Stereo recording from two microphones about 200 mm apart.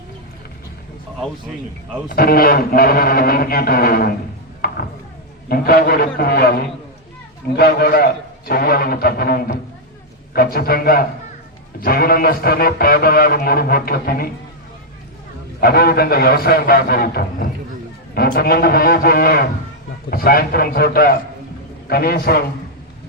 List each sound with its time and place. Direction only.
2.0 s a man's voice: 50° left (ahead or behind)
5.5 s a man's voice: 50° left (ahead or behind)
15.6 s a man's voice: 50° left (ahead or behind)